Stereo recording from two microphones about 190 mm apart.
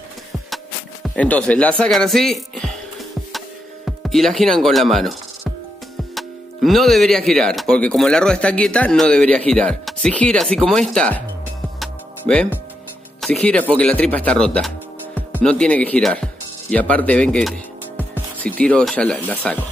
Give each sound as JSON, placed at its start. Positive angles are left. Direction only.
{"t": 1.0, "sound": "speech", "side_deg": 5}
{"t": 3.3, "sound": "music", "side_deg": 0}
{"t": 6.1, "sound": "speech", "side_deg": 0}
{"t": 11.8, "sound": "music", "side_deg": 5}
{"t": 13.2, "sound": "speech", "side_deg": 5}